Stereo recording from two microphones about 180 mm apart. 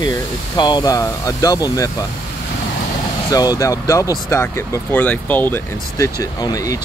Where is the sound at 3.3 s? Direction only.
20° left (ahead or behind).